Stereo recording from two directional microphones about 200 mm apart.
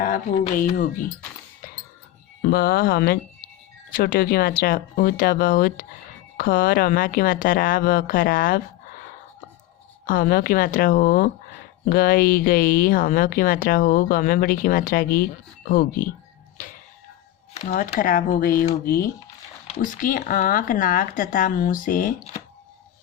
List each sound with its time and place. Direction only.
0.5 s speech: 45° left (ahead or behind)
2.4 s speech: 50° left (ahead or behind)
10.1 s speech: 45° left (ahead or behind)
16.6 s a sound: 45° left (ahead or behind)
17.5 s speech: 40° left (ahead or behind)